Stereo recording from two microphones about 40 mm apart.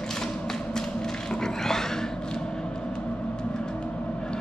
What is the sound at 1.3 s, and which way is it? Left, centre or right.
Dog, centre.